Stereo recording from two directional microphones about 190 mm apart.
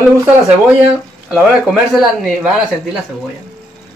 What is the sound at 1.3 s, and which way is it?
Speech, centre (ahead or behind).